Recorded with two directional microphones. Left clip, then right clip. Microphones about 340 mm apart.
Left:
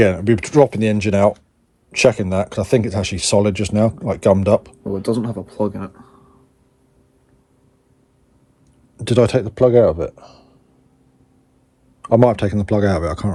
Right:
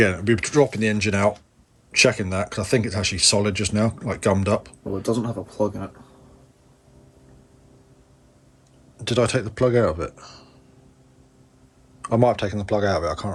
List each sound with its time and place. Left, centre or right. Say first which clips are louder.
0.0 s speech: left 4 dB; centre
9.0 s speech: left 6 dB; centre
12.0 s speech: left 6 dB; centre